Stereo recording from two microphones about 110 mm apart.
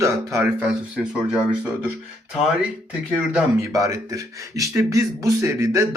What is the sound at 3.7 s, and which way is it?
Speech, 30° right (ahead or behind).